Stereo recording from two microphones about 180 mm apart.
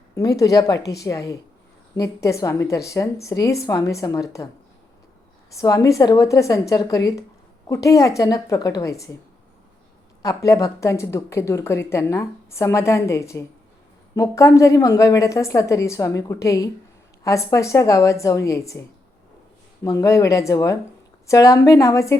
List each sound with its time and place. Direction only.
0.2 s a woman's voice: 20° left (ahead or behind)
5.5 s a woman's voice: 20° left (ahead or behind)
10.2 s a woman's voice: 20° left (ahead or behind)
19.8 s a woman's voice: 20° left (ahead or behind)